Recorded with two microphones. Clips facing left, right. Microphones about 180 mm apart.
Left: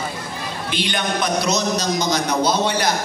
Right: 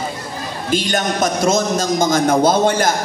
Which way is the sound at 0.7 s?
45° right (ahead or behind).